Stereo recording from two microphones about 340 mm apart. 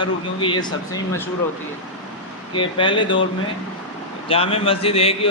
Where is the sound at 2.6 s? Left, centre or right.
Centre.